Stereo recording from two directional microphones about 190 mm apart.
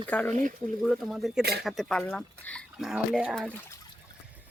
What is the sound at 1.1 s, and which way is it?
Speech, centre (ahead or behind).